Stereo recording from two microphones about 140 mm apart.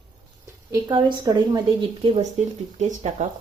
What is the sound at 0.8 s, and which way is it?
A woman's voice, 30° right (ahead or behind).